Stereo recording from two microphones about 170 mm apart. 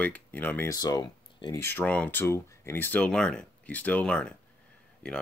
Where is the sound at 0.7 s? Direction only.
25° left (ahead or behind).